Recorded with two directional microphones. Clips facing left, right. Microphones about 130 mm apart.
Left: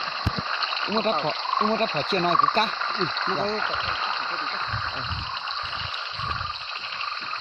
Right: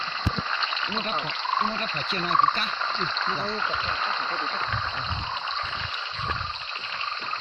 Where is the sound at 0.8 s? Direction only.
45° left (ahead or behind).